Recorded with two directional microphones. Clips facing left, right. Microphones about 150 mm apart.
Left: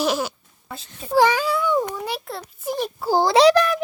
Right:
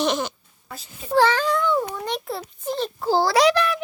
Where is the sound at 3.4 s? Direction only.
40° left (ahead or behind).